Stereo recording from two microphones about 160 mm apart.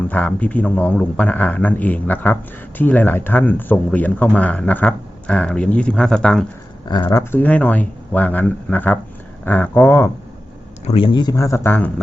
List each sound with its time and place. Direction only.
0.1 s a man's voice: 10° left (ahead or behind)
10.8 s speech: 35° left (ahead or behind); by 11.9 s 15° left (ahead or behind)